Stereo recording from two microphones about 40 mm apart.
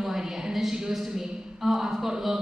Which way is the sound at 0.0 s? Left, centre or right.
Centre.